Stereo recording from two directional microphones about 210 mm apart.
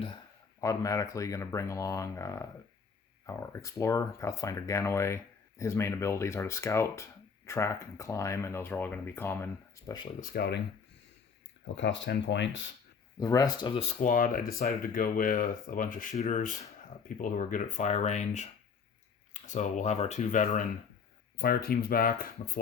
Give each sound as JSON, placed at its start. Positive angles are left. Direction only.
{"t": 0.6, "sound": "speech", "side_deg": 15}
{"t": 10.2, "sound": "speech", "side_deg": 45}
{"t": 11.6, "sound": "speech", "side_deg": 60}
{"t": 13.1, "sound": "speech", "side_deg": 15}